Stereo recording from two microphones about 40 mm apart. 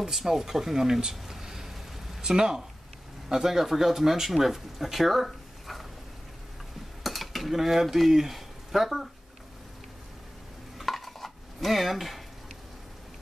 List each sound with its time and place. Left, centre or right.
0.0 s speech: centre
7.0 s speech: centre
10.8 s stir: centre